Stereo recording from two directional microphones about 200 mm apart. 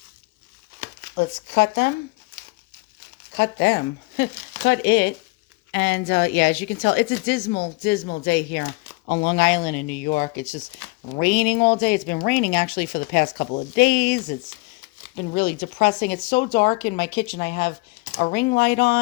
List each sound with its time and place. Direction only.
1.1 s a woman's voice: 60° left (ahead or behind)
3.3 s a woman's voice: 60° left (ahead or behind)
9.0 s speech: 50° left (ahead or behind)